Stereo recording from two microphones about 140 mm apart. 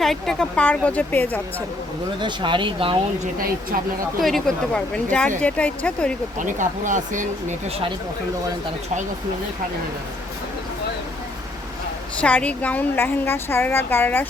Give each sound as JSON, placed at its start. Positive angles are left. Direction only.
{"t": 0.0, "sound": "a woman's voice", "side_deg": 0}
{"t": 2.2, "sound": "speech", "side_deg": -35}
{"t": 4.2, "sound": "a woman's voice", "side_deg": 0}
{"t": 6.4, "sound": "speech", "side_deg": -65}
{"t": 12.2, "sound": "a woman's voice", "side_deg": 10}